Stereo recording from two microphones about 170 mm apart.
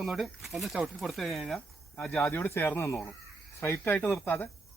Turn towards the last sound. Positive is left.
turn(degrees=10)  # may be behind; listen again after turning